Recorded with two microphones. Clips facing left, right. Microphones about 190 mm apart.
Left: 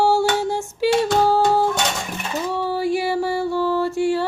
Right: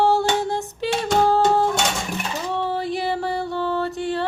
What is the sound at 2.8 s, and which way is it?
Music, 5° left (ahead or behind).